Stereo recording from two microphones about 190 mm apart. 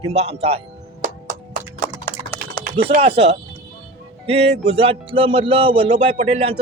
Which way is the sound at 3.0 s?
30° right (ahead or behind).